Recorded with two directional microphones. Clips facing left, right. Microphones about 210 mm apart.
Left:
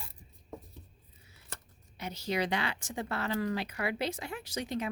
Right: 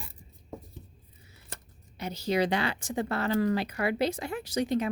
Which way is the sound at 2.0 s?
35° right (ahead or behind).